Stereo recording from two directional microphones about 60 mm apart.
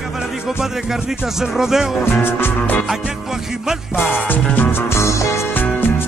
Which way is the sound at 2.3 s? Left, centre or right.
Left.